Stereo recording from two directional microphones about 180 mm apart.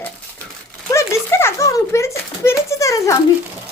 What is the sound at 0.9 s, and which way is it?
A child's voice, 15° left (ahead or behind).